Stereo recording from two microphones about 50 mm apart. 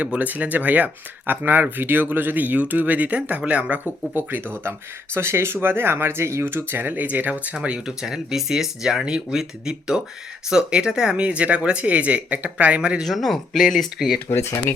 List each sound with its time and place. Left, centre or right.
0.0 s speech: right
5.1 s speech: right
7.9 s speech: centre
13.1 s speech: centre
14.3 s speech: left